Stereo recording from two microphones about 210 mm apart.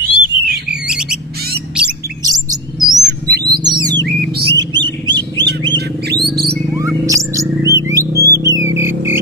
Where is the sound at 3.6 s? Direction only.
20° right (ahead or behind).